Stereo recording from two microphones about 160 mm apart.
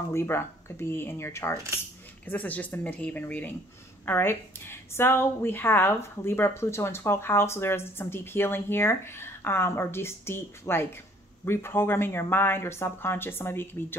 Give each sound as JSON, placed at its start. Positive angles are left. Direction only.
{"t": 0.1, "sound": "a woman's voice", "side_deg": 15}